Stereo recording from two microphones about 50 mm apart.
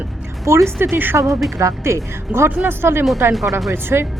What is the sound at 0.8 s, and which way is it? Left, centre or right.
Speech, right.